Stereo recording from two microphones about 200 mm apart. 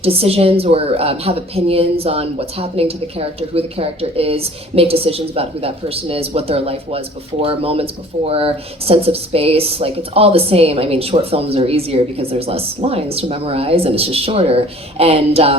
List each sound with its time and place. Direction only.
0.0 s speech: 30° right (ahead or behind)